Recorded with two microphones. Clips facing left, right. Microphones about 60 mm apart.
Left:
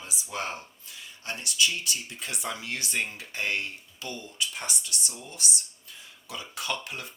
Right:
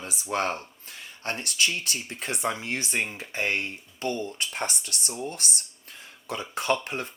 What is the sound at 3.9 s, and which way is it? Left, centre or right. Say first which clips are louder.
Speech: right 7 dB; right.